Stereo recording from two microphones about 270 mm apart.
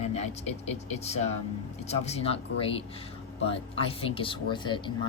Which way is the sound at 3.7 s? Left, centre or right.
Left.